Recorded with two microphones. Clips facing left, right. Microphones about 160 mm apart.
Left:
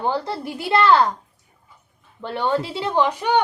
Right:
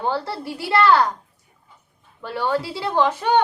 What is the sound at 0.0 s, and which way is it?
A woman's voice, 15° left (ahead or behind).